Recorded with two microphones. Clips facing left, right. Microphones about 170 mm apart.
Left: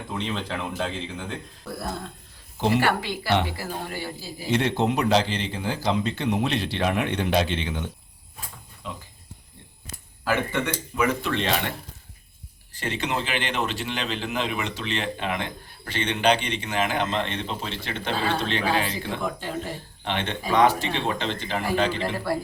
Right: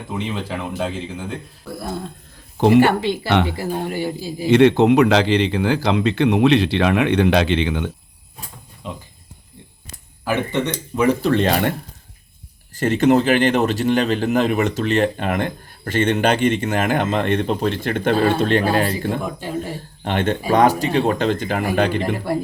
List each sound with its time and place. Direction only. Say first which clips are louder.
0.1 s a man's voice: right 4 dB; 10° right (ahead or behind)
2.6 s speech: right 10 dB; 60° right (ahead or behind)
2.8 s a man's voice: right 7 dB; 25° right (ahead or behind)
4.4 s speech: right 11 dB; 75° right (ahead or behind)
8.8 s speech: right 5 dB; 20° right (ahead or behind)
10.2 s speech: right 4 dB; 20° right (ahead or behind)
10.9 s speech: right 8 dB; 30° right (ahead or behind)
12.7 s a man's voice: right 13 dB; 45° right (ahead or behind)
19.2 s a man's voice: right 4 dB; 10° right (ahead or behind)
20.1 s a man's voice: right 7 dB; 50° right (ahead or behind)
22.0 s a man's voice: right 4 dB; 15° right (ahead or behind)